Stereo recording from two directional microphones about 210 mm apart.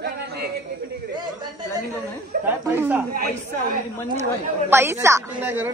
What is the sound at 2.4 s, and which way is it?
Speech, 10° right (ahead or behind).